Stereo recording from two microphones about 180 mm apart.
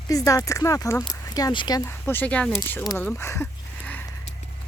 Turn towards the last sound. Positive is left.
turn(degrees=10)  # may be behind; listen again after turning